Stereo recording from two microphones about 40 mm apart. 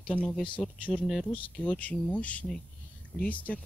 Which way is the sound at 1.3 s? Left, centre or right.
Left.